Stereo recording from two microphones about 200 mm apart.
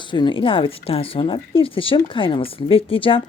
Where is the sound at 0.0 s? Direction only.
25° left (ahead or behind).